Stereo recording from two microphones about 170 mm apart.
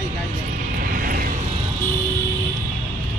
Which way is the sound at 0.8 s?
55° right (ahead or behind).